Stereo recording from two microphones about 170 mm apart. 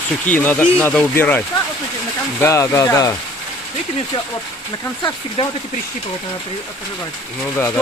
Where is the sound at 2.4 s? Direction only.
15° left (ahead or behind).